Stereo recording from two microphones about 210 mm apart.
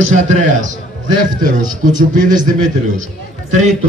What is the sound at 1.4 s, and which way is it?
A man's voice, 40° right (ahead or behind).